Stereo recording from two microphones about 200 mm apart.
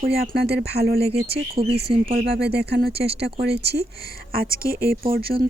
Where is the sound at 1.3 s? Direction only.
30° right (ahead or behind).